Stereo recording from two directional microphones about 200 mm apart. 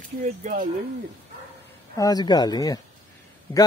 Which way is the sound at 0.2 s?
40° right (ahead or behind).